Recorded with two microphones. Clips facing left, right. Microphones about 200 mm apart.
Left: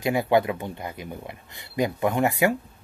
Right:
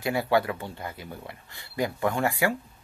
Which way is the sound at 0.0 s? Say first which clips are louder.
Left 3 dB; 20° left (ahead or behind).